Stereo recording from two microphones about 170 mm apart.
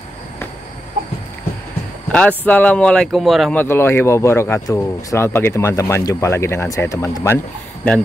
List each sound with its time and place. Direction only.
2.1 s speech: 10° left (ahead or behind)
3.6 s speech: 15° left (ahead or behind)